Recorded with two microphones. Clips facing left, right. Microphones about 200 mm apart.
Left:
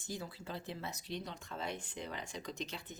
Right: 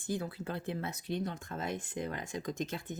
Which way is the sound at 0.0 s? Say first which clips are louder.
Right 8 dB; 55° right (ahead or behind).